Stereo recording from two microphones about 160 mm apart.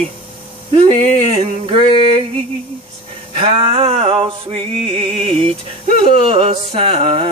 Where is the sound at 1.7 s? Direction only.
35° right (ahead or behind).